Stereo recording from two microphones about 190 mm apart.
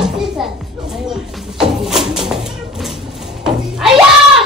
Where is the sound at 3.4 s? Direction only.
5° right (ahead or behind).